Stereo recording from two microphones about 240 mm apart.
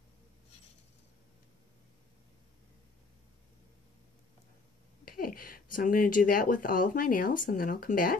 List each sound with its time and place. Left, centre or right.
5.0 s speech: left